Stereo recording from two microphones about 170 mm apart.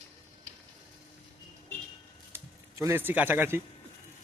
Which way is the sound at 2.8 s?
15° right (ahead or behind).